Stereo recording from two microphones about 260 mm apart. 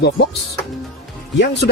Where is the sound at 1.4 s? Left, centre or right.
Left.